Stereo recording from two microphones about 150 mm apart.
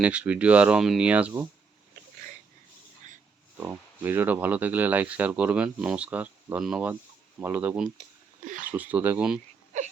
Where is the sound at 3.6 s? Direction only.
15° right (ahead or behind).